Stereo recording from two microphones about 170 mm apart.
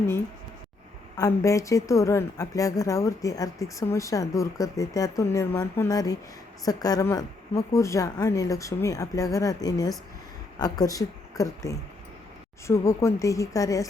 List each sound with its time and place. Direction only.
1.1 s a woman's voice: 20° left (ahead or behind)